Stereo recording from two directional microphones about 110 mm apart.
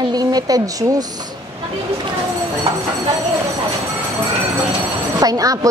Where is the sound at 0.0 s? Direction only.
35° right (ahead or behind).